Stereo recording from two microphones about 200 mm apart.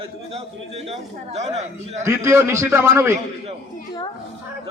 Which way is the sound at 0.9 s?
30° right (ahead or behind).